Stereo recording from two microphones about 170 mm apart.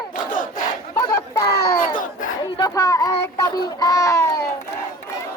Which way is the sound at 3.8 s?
20° left (ahead or behind).